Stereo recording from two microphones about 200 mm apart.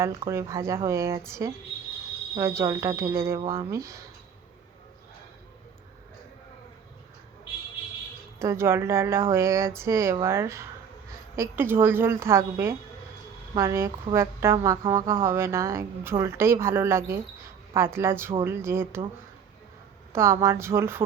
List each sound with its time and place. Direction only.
0.0 s a woman's voice: 15° right (ahead or behind)
8.4 s a woman's voice: 15° right (ahead or behind)
20.1 s a woman's voice: 15° right (ahead or behind)